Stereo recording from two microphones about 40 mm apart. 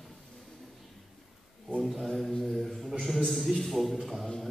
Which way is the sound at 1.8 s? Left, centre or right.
Centre.